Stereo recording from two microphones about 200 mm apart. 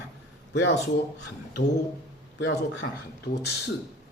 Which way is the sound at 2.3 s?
75° left (ahead or behind).